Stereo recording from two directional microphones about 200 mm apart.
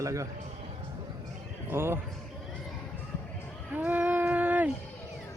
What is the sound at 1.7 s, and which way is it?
Speech, 10° right (ahead or behind).